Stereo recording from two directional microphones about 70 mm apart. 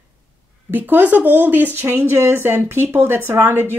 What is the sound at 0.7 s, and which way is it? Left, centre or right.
Speech, right.